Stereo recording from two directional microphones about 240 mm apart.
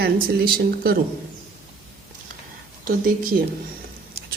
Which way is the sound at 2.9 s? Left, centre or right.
Right.